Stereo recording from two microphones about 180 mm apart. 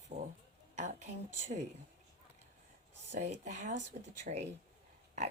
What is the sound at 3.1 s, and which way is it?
Speech, 40° right (ahead or behind).